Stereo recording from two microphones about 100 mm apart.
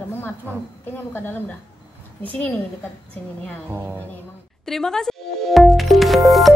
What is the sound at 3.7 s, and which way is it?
Speech, 25° right (ahead or behind).